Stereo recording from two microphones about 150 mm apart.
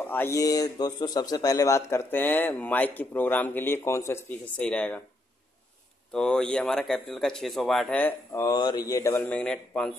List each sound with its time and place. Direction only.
0.0 s speech: 15° left (ahead or behind)
4.6 s speech: 10° left (ahead or behind)
6.1 s speech: 5° left (ahead or behind)
8.3 s speech: 20° left (ahead or behind); by 9.9 s 5° left (ahead or behind)